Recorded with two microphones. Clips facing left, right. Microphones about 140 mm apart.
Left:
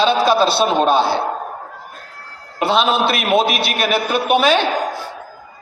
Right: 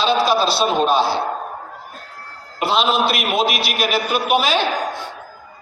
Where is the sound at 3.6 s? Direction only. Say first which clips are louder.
Left 2 dB; 60° left (ahead or behind).